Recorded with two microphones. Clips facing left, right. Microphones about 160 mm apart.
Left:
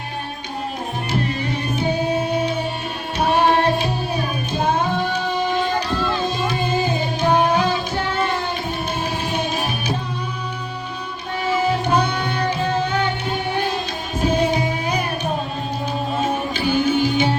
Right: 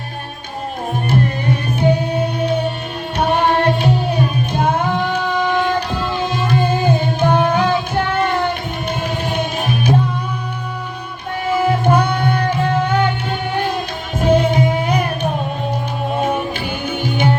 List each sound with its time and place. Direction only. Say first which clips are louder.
4.5 s music: right 1 dB; 55° right (ahead or behind)
11.6 s music: right 5 dB; 55° right (ahead or behind)
14.2 s music: right 5 dB; 55° right (ahead or behind)
16.9 s music: left 1 dB; 55° right (ahead or behind)